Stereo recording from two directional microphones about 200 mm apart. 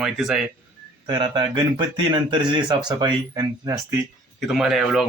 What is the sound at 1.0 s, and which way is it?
Speech, 20° right (ahead or behind).